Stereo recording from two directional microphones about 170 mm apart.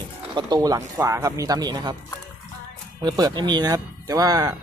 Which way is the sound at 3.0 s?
25° right (ahead or behind).